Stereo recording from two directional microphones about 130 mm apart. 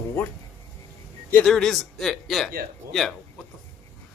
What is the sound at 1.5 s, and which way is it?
A man's voice, centre (ahead or behind).